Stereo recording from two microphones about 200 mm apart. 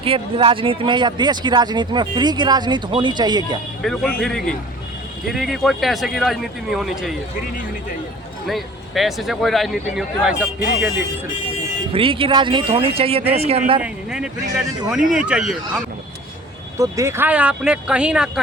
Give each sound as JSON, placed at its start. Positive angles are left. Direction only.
{"t": 0.0, "sound": "speech", "side_deg": -25}
{"t": 3.8, "sound": "speech", "side_deg": 0}
{"t": 8.4, "sound": "speech", "side_deg": 0}
{"t": 11.9, "sound": "speech", "side_deg": -25}
{"t": 13.8, "sound": "speech", "side_deg": -5}
{"t": 16.7, "sound": "speech", "side_deg": -15}